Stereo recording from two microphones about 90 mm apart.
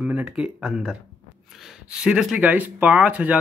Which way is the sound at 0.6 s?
5° right (ahead or behind).